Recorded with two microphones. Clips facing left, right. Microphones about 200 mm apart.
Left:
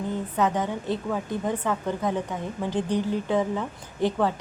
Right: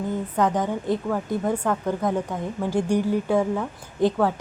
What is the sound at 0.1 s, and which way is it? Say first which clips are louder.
Speech: right 2 dB; 10° right (ahead or behind).